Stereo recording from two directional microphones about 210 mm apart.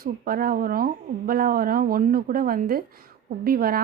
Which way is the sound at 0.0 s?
45° right (ahead or behind).